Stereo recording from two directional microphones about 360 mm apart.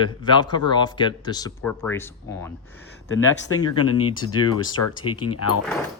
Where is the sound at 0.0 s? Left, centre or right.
Centre.